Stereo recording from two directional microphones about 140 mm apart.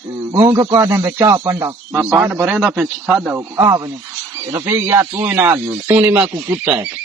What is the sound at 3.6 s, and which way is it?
A man's voice, 20° right (ahead or behind).